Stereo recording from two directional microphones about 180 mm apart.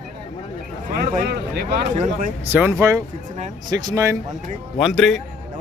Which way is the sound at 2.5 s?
10° right (ahead or behind).